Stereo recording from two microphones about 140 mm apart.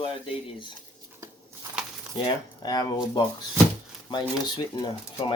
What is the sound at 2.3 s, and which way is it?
Speech, 30° left (ahead or behind).